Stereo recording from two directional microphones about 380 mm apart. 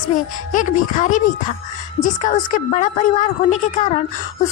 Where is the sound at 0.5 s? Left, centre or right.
Centre.